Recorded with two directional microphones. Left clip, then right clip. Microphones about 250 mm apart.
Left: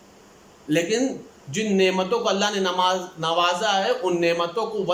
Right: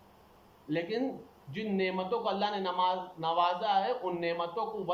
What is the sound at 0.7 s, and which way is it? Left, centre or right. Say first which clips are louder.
A man's voice: left 11 dB; left.